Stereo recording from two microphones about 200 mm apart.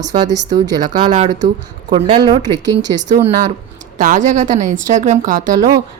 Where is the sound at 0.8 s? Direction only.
25° right (ahead or behind).